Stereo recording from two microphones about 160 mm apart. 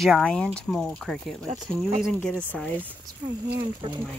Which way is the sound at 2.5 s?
10° left (ahead or behind).